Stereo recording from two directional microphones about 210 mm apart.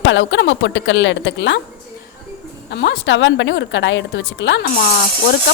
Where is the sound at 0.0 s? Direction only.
60° left (ahead or behind).